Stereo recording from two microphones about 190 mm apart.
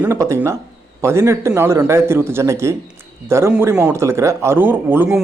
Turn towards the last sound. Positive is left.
turn(degrees=-10)  # may be behind; listen again after turning